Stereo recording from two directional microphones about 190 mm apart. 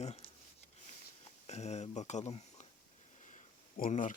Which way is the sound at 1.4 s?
35° left (ahead or behind).